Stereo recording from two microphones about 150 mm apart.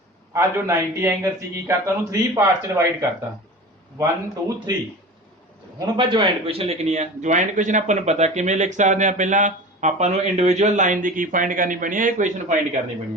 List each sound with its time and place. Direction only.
0.3 s a man's voice: 20° right (ahead or behind)
5.8 s a man's voice: 30° right (ahead or behind); by 12.5 s 55° right (ahead or behind)